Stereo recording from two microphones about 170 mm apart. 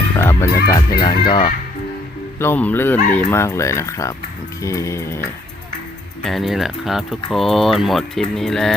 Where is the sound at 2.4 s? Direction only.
10° left (ahead or behind).